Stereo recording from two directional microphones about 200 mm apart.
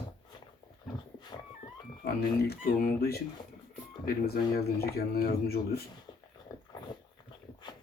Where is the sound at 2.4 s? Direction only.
50° left (ahead or behind).